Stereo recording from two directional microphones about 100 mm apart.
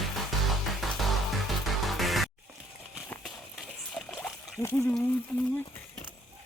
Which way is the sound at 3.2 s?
Centre (ahead or behind).